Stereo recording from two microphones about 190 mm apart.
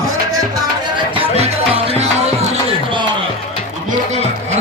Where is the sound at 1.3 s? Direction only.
35° right (ahead or behind).